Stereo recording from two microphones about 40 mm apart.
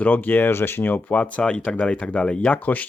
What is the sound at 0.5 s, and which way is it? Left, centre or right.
Speech, left.